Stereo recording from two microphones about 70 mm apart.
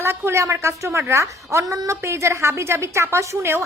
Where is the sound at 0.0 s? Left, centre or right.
Right.